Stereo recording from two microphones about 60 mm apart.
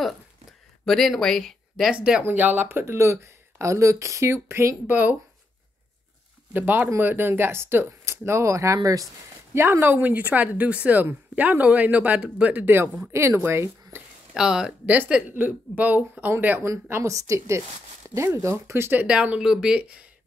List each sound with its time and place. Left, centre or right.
0.8 s speech: centre
1.9 s speech: centre
2.2 s speech: right
2.8 s speech: right
4.3 s speech: right
4.8 s speech: right
6.5 s speech: right
9.5 s speech: right
13.1 s speech: right
13.9 s a sound: right
14.3 s speech: centre
14.9 s speech: right
17.0 s speech: right
19.0 s speech: right